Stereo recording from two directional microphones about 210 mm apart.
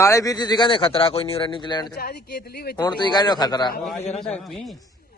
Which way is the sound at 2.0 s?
45° left (ahead or behind).